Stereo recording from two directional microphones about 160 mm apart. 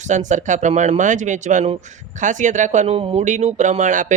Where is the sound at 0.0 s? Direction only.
50° right (ahead or behind).